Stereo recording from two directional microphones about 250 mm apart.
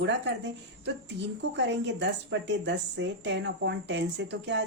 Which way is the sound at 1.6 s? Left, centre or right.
Right.